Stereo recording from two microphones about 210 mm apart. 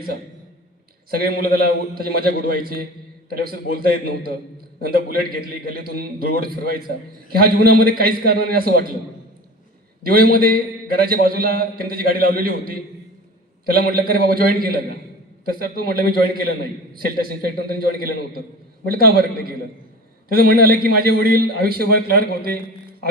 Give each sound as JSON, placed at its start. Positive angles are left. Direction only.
{"t": 1.1, "sound": "a man's voice", "side_deg": -45}
{"t": 10.0, "sound": "a man's voice", "side_deg": -45}